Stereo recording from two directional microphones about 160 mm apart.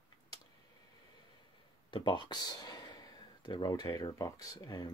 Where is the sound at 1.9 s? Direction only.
30° left (ahead or behind).